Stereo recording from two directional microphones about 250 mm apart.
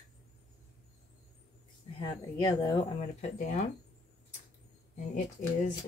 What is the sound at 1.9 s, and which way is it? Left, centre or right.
A woman's voice, left.